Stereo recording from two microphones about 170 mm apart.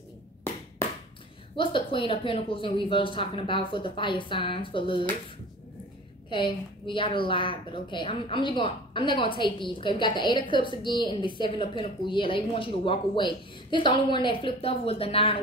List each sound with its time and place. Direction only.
1.6 s a woman's voice: 30° left (ahead or behind)
6.3 s a woman's voice: 30° left (ahead or behind)